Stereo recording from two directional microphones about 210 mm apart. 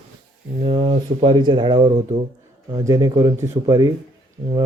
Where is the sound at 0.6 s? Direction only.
25° right (ahead or behind).